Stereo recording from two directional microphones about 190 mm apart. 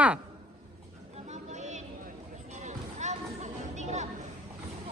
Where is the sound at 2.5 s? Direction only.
40° right (ahead or behind).